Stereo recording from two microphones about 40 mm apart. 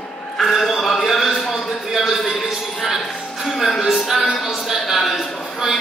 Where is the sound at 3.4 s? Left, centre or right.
Centre.